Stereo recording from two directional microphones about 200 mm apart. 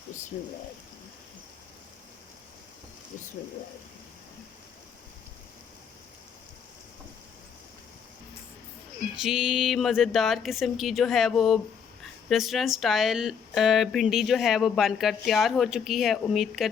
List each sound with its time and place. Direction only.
0.3 s speech: 40° left (ahead or behind)
9.1 s speech: centre (ahead or behind)